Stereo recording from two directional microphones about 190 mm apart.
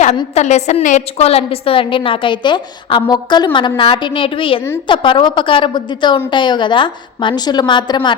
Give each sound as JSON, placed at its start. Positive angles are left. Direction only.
{"t": 0.3, "sound": "a woman's voice", "side_deg": 35}